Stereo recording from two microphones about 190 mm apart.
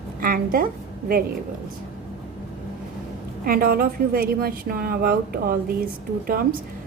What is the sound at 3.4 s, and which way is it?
A woman's voice, 50° right (ahead or behind).